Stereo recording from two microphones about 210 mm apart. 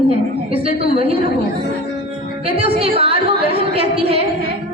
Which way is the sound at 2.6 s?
25° right (ahead or behind).